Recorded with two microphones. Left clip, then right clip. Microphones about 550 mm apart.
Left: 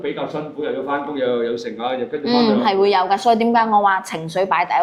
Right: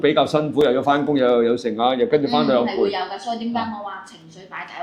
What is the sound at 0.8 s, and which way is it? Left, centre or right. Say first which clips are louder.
Speech: right 4 dB; centre.